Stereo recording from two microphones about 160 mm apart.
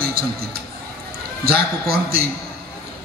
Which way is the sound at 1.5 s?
75° right (ahead or behind).